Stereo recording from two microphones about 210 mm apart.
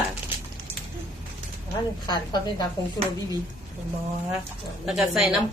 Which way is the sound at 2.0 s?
20° left (ahead or behind).